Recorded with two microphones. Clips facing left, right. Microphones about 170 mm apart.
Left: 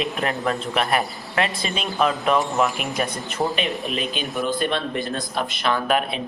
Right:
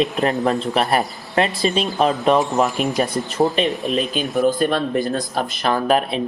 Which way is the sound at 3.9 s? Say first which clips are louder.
Right 6 dB; 40° right (ahead or behind).